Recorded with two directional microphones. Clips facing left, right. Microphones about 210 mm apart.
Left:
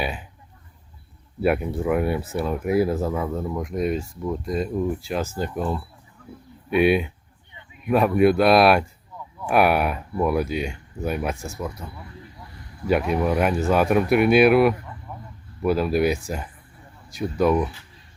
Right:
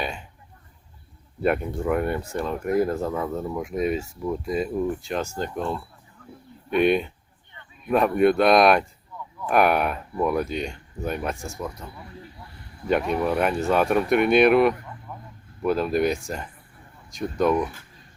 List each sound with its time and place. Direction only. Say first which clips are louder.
0.0 s speech: left 2 dB; 5° left (ahead or behind)
1.4 s speech: left 2 dB; 5° left (ahead or behind)
15.1 s a sound: left 1 dB; 5° left (ahead or behind)
15.6 s speech: left 2 dB; 5° left (ahead or behind)